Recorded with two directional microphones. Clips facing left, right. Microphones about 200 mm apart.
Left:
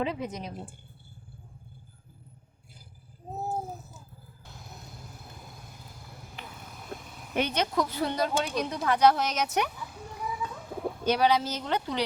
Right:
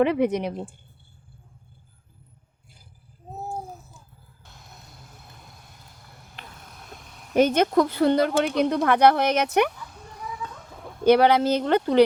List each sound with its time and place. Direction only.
0.0 s a woman's voice: 65° right (ahead or behind)
6.0 s vehicle: 5° left (ahead or behind)
7.3 s speech: 45° right (ahead or behind)
9.9 s a sound: 5° left (ahead or behind)
11.0 s speech: 60° right (ahead or behind)